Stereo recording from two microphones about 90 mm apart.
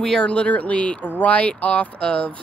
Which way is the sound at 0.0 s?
10° left (ahead or behind).